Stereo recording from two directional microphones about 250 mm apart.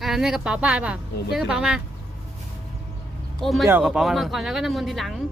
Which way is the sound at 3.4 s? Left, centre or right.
Centre.